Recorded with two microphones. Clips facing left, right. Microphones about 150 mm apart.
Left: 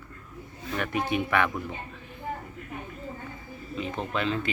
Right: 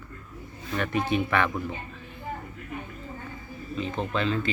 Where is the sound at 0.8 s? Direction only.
15° left (ahead or behind).